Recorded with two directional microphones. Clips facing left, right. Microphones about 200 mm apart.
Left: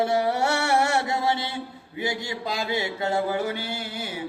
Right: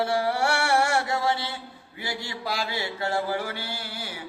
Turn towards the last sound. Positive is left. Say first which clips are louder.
# left 3 dB
turn(degrees=20)  # may be behind; listen again after turning